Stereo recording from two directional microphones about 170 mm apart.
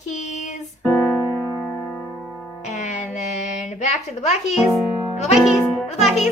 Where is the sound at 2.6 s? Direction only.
40° left (ahead or behind).